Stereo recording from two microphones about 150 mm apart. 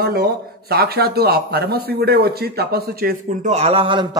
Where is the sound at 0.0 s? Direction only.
90° right.